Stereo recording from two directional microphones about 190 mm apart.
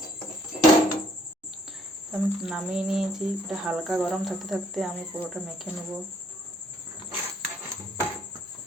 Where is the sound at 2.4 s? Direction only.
5° right (ahead or behind).